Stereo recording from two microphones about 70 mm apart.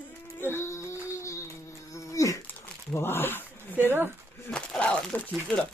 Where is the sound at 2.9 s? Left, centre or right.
Left.